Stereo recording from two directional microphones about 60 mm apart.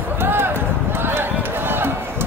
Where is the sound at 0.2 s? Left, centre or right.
Right.